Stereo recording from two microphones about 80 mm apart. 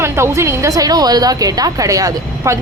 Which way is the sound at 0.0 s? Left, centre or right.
Right.